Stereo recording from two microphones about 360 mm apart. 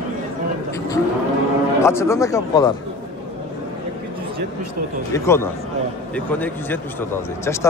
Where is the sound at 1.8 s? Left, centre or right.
Centre.